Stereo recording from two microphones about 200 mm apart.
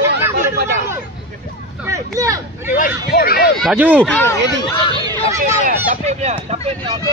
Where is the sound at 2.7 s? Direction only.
45° left (ahead or behind).